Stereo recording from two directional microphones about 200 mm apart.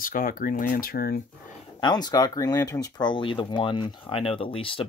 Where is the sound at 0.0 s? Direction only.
45° left (ahead or behind).